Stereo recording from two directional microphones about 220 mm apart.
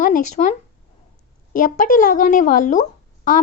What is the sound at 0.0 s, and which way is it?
Speech, 35° left (ahead or behind).